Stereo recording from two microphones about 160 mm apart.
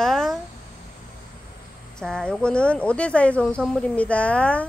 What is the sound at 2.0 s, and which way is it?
Speech, 5° left (ahead or behind).